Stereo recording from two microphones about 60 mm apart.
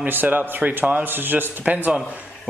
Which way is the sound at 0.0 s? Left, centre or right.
Right.